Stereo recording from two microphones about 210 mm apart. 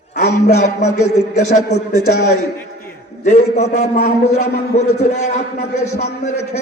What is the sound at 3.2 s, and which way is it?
A man's voice, 35° left (ahead or behind).